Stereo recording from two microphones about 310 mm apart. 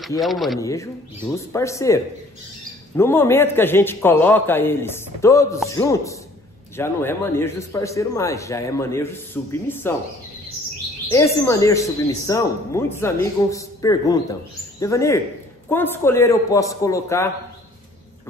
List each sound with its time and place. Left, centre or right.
0.0 s a man's voice: centre
3.0 s a man's voice: centre
11.1 s a man's voice: centre